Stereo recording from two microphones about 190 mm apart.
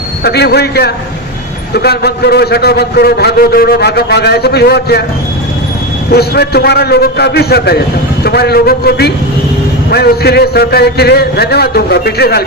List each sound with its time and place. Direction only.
0.3 s a man's voice: 60° left (ahead or behind)
6.1 s a man's voice: 55° left (ahead or behind)